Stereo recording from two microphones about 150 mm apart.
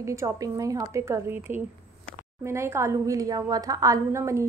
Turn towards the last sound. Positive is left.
turn(degrees=-20)  # may be behind; listen again after turning